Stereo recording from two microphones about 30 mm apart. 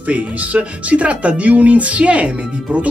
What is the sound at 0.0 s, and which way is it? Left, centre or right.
Speech, right.